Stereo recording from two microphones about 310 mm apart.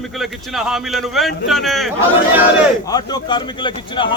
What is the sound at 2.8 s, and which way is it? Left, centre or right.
Speech, centre.